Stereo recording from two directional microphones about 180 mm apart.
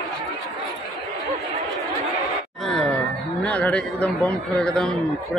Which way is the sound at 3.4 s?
5° left (ahead or behind).